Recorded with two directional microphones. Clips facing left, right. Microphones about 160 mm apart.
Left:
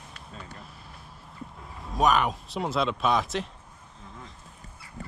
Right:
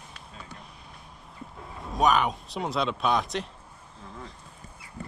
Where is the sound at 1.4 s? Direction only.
Centre (ahead or behind).